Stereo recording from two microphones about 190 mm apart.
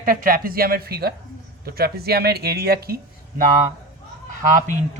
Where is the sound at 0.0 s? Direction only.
45° right (ahead or behind).